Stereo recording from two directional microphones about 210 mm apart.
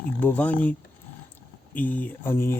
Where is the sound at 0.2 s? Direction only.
10° left (ahead or behind).